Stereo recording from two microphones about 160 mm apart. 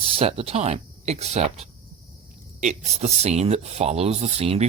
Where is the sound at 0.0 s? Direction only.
35° right (ahead or behind).